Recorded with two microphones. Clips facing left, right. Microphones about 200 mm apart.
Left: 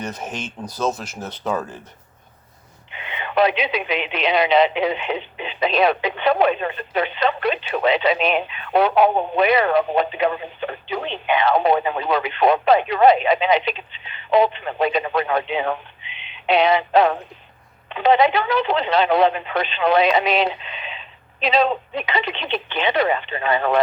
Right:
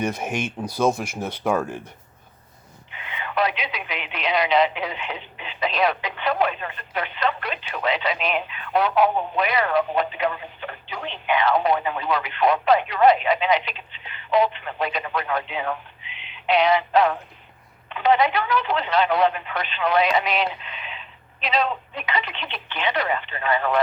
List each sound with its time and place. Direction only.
0.0 s speech: 10° right (ahead or behind)
2.9 s speech: 25° left (ahead or behind)